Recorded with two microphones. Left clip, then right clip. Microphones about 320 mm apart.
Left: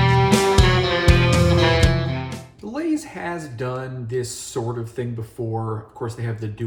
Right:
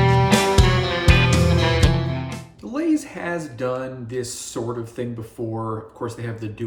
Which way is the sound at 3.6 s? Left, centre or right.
Centre.